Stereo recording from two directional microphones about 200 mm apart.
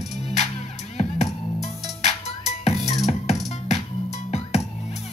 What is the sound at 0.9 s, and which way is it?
Music, 35° left (ahead or behind).